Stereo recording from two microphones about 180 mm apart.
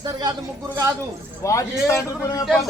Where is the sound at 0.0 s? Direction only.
20° right (ahead or behind).